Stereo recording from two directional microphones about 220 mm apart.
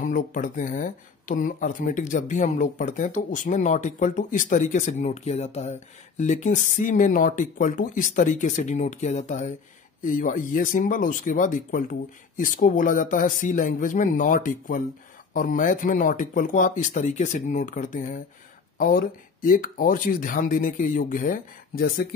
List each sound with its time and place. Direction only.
0.0 s speech: 35° left (ahead or behind)